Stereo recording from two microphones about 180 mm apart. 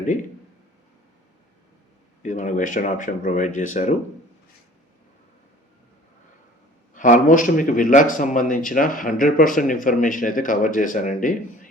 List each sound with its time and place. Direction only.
2.2 s speech: 45° left (ahead or behind)
6.9 s speech: 45° left (ahead or behind)